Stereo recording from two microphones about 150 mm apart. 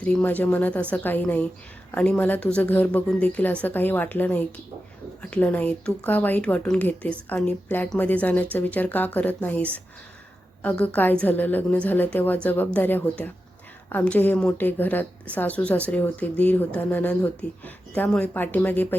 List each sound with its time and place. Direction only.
0.0 s speech: 10° left (ahead or behind)